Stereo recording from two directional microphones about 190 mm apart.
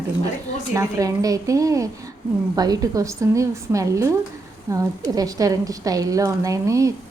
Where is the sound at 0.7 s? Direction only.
20° right (ahead or behind).